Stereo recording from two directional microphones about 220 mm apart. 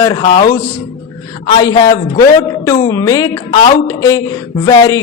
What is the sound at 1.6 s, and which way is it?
Speech, 20° left (ahead or behind).